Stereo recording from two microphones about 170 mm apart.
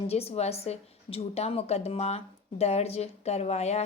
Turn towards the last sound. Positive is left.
turn(degrees=40)  # may be behind; listen again after turning